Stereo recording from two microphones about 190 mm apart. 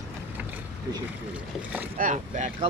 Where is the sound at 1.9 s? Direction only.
40° right (ahead or behind).